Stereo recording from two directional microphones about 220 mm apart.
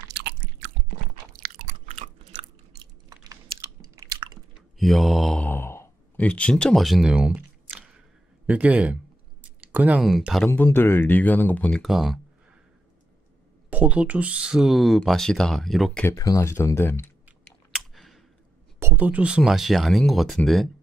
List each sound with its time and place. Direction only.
0.1 s chewing: 50° right (ahead or behind)
1.9 s chewing: 30° right (ahead or behind)
3.9 s chewing: 15° right (ahead or behind)
4.7 s speech: centre (ahead or behind)
13.7 s speech: 5° right (ahead or behind); by 17.1 s 10° left (ahead or behind)
17.7 s a sound: centre (ahead or behind)
18.8 s speech: 10° right (ahead or behind)